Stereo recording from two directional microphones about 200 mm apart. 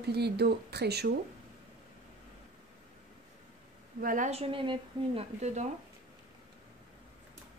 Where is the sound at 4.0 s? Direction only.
40° right (ahead or behind).